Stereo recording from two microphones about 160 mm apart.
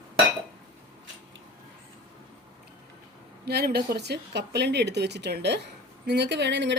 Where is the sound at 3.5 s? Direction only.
85° right.